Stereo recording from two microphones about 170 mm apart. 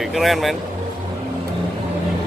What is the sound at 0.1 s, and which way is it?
Speech, centre (ahead or behind).